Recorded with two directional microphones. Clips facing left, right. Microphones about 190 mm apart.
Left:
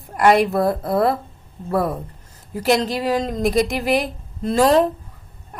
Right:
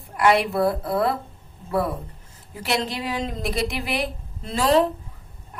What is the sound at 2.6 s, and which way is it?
A woman's voice, 40° left (ahead or behind).